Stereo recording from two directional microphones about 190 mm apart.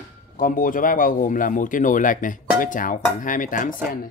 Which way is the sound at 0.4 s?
45° left (ahead or behind).